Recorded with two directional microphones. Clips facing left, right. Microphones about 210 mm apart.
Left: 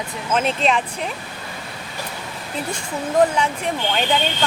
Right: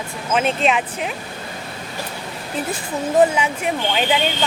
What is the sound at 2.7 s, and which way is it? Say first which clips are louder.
Speech: right 2 dB; 5° right (ahead or behind).